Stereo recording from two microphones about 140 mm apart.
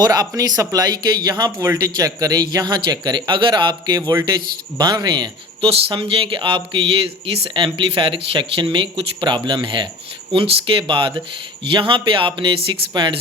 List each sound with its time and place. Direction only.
0.0 s speech: 25° right (ahead or behind)